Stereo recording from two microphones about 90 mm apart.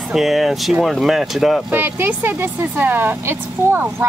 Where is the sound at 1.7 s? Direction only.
20° right (ahead or behind).